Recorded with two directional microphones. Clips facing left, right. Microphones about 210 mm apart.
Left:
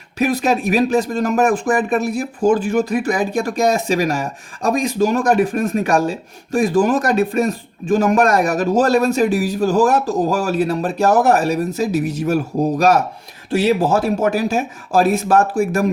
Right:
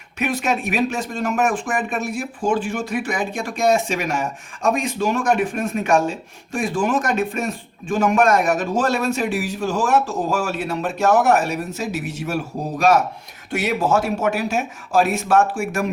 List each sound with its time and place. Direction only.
0.2 s speech: 35° left (ahead or behind)
13.5 s speech: 30° left (ahead or behind)